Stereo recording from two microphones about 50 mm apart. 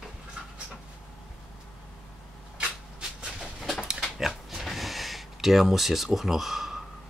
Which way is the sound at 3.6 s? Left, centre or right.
Centre.